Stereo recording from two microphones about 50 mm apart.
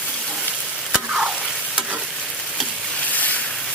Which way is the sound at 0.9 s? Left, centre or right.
Centre.